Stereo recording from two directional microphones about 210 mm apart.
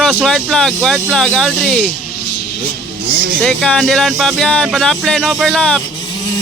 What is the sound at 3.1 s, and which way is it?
Speech, 45° right (ahead or behind).